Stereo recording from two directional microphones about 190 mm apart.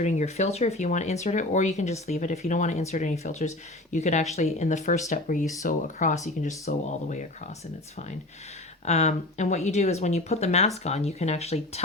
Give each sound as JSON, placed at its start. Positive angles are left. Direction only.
{"t": 0.0, "sound": "speech", "side_deg": 35}
{"t": 8.8, "sound": "speech", "side_deg": 35}